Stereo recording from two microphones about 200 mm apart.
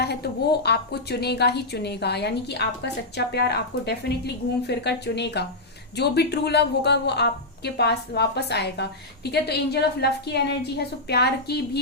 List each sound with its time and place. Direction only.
0.0 s a woman's voice: 55° left (ahead or behind)